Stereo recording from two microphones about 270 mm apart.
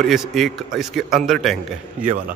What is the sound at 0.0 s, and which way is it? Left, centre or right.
A man's voice, centre.